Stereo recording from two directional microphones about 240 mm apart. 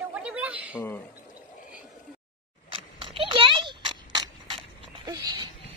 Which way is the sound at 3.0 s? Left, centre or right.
Right.